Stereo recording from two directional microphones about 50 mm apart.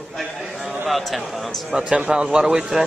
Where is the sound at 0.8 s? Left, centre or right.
Centre.